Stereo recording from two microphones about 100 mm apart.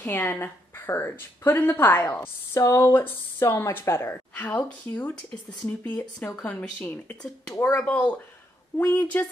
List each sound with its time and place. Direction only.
0.0 s a woman's voice: 20° left (ahead or behind)
7.8 s a woman's voice: 15° left (ahead or behind)